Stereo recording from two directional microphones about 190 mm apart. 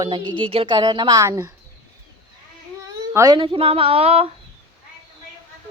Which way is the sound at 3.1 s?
15° right (ahead or behind).